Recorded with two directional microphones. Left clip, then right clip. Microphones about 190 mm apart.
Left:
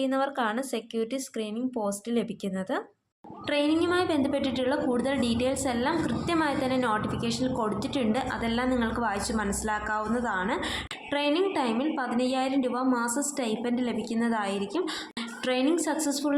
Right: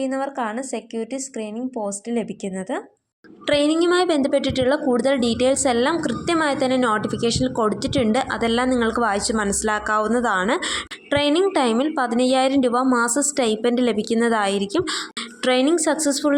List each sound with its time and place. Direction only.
0.0 s speech: 10° right (ahead or behind)
3.4 s a woman's voice: 40° right (ahead or behind)